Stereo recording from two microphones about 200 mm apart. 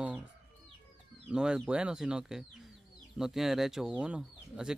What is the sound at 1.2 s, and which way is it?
Speech, 5° right (ahead or behind).